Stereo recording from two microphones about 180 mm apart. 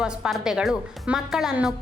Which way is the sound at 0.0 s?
5° right (ahead or behind).